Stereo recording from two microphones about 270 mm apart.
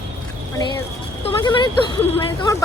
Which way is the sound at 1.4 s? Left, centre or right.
Centre.